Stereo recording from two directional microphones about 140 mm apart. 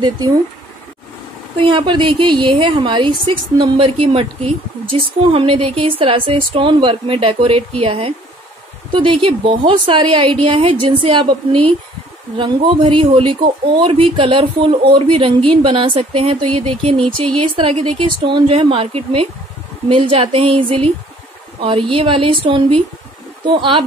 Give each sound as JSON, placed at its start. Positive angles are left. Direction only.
{"t": 0.0, "sound": "speech", "side_deg": -25}
{"t": 1.6, "sound": "speech", "side_deg": -35}